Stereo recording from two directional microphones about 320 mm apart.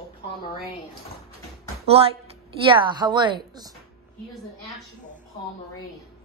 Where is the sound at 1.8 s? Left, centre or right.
Centre.